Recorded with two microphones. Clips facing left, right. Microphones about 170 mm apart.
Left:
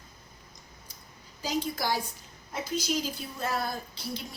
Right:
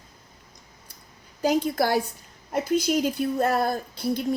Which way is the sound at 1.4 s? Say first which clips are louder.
Right 9 dB; 60° right (ahead or behind).